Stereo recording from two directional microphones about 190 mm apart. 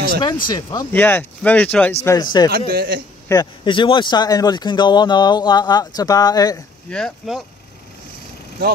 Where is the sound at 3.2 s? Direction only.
20° left (ahead or behind).